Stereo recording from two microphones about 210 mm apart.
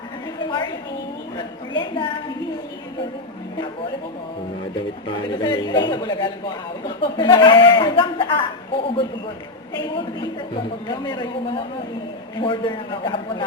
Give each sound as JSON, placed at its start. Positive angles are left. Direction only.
{"t": 0.4, "sound": "a woman's voice", "side_deg": 20}
{"t": 5.0, "sound": "speech", "side_deg": 20}